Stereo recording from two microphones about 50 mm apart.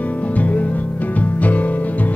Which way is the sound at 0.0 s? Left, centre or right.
Left.